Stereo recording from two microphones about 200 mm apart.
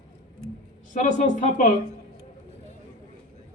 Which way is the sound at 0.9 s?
40° left (ahead or behind).